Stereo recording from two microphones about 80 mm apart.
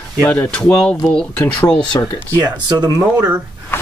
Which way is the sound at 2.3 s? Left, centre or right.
Right.